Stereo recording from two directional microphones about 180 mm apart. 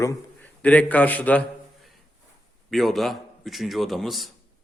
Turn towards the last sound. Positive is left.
turn(degrees=0)  # may be behind; listen again after turning